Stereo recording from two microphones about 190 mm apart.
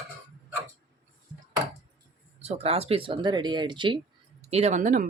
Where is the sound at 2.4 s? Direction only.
35° right (ahead or behind).